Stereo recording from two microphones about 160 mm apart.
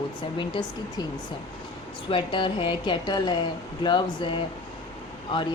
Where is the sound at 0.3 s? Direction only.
30° left (ahead or behind).